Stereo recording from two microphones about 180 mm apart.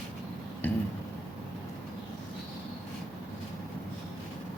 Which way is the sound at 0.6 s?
10° left (ahead or behind).